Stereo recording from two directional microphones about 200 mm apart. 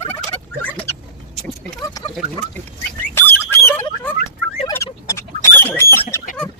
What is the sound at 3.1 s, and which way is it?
Chicken, 10° left (ahead or behind).